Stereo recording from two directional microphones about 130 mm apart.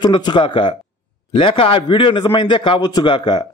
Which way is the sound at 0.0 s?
35° left (ahead or behind).